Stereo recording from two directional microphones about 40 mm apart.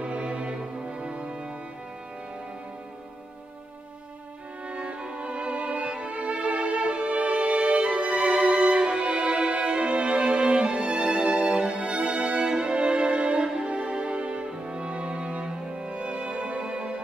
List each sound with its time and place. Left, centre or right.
0.0 s music: right
4.6 s music: right